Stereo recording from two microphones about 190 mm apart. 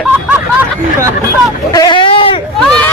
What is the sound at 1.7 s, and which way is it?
Speech, 20° left (ahead or behind).